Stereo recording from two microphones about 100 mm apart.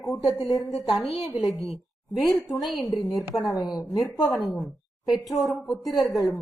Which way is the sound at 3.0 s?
35° left (ahead or behind).